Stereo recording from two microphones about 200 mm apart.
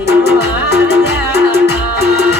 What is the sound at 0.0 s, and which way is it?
Music, 55° left (ahead or behind).